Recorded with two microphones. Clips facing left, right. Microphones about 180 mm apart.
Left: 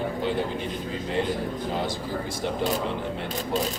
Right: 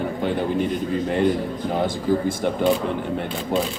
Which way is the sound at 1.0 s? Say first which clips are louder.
Right 5 dB; 55° right (ahead or behind).